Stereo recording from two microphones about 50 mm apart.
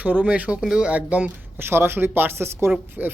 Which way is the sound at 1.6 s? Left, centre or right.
Right.